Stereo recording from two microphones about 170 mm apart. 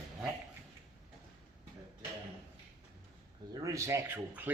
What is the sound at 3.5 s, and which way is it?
Speech, 20° right (ahead or behind).